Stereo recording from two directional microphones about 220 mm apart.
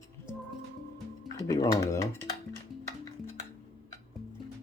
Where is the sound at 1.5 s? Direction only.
15° left (ahead or behind).